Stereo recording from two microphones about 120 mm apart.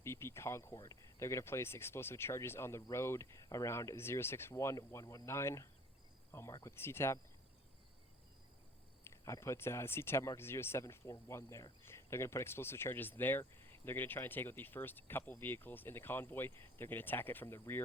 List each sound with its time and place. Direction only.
0.0 s speech: 20° left (ahead or behind)
9.0 s speech: 25° left (ahead or behind)